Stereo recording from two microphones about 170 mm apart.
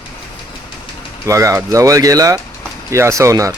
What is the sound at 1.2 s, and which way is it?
Speech, 20° right (ahead or behind).